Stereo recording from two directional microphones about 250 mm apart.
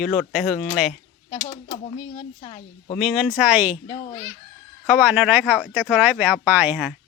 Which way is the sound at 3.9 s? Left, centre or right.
Centre.